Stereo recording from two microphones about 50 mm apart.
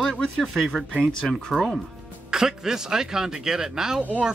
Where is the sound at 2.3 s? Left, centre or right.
Centre.